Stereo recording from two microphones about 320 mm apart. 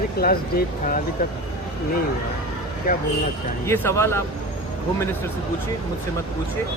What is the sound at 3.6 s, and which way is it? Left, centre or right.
Speech, centre.